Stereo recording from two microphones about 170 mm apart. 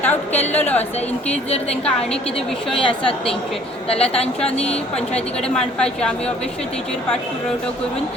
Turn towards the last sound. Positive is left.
turn(degrees=5)  # may be behind; listen again after turning